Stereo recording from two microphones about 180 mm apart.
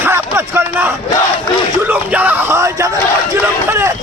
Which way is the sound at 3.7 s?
15° right (ahead or behind).